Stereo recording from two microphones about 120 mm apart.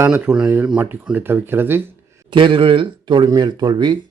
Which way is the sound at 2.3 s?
45° right (ahead or behind).